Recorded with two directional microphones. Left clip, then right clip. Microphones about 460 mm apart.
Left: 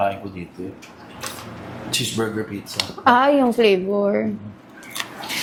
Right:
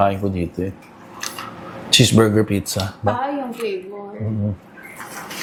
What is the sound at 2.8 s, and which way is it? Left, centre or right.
Speech, left.